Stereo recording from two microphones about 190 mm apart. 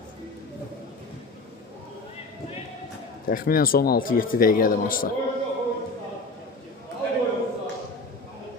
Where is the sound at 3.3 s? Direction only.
50° left (ahead or behind).